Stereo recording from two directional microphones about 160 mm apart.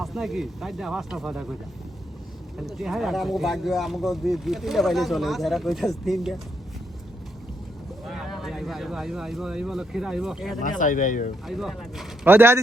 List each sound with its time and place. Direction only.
0.0 s speech: centre (ahead or behind)
2.6 s speech: centre (ahead or behind)
8.0 s speech: centre (ahead or behind)
10.6 s speech: 55° left (ahead or behind)
11.4 s speech: centre (ahead or behind)
12.2 s speech: 15° right (ahead or behind)